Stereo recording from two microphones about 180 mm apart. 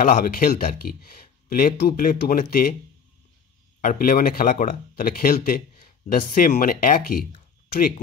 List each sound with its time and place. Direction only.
0.0 s speech: 50° left (ahead or behind)
3.8 s speech: 50° left (ahead or behind)